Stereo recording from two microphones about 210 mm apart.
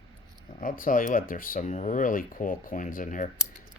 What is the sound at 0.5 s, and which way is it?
Speech, 40° left (ahead or behind).